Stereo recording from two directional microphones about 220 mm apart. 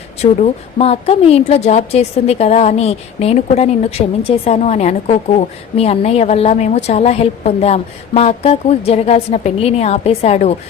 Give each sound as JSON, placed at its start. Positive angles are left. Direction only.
{"t": 0.2, "sound": "a woman's voice", "side_deg": 30}